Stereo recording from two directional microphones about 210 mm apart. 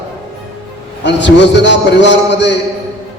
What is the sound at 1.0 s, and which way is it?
A man's voice, 55° left (ahead or behind).